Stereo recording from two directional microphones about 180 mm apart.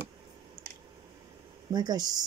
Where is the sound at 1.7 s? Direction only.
20° right (ahead or behind).